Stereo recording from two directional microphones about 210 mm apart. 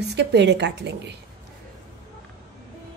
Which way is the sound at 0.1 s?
55° right (ahead or behind).